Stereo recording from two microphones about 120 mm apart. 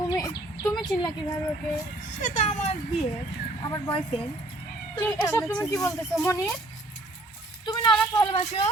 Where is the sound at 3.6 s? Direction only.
35° left (ahead or behind).